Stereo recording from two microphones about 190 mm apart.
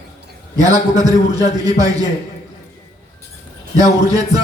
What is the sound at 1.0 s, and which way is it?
Speech, 20° right (ahead or behind).